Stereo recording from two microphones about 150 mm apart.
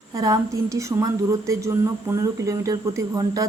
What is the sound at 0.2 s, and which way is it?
A woman's voice, 25° right (ahead or behind).